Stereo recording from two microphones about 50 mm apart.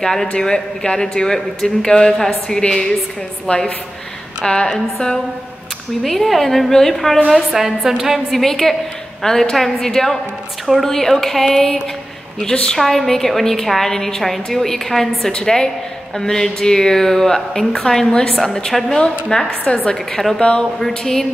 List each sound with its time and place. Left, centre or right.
0.0 s a woman's voice: centre
7.2 s a woman's voice: centre; by 20.0 s left
20.1 s a woman's voice: centre
20.3 s speech: centre
20.9 s a woman's voice: centre